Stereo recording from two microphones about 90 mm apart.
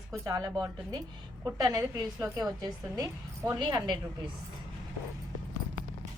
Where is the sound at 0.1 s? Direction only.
45° right (ahead or behind).